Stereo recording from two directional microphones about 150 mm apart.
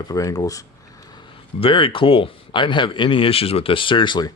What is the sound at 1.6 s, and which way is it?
Speech, 35° left (ahead or behind).